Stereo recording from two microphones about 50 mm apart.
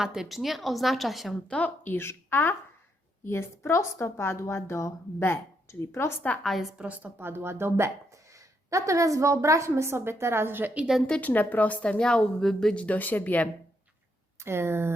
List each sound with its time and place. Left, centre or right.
0.0 s a woman's voice: centre
1.5 s speech: left
1.9 s speech: left
3.2 s a woman's voice: left
5.6 s a woman's voice: left
6.4 s a woman's voice: centre
6.8 s a woman's voice: right
7.2 s speech: right
8.7 s a woman's voice: right
11.2 s a woman's voice: left; by 12.7 s centre
12.7 s speech: left
14.3 s speech: right